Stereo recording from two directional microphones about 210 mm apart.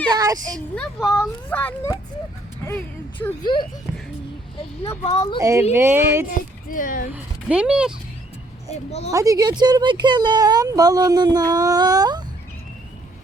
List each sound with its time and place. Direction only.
0.1 s a woman's voice: 20° right (ahead or behind)
0.8 s a child's voice: centre (ahead or behind)
3.4 s speech: 25° left (ahead or behind)
4.8 s speech: 30° left (ahead or behind)
5.4 s a woman's voice: 15° right (ahead or behind)
6.2 s a woman's voice: 40° left (ahead or behind)
7.1 s speech: 5° right (ahead or behind)
8.9 s a woman's voice: 30° left (ahead or behind)
9.1 s speech: 15° right (ahead or behind)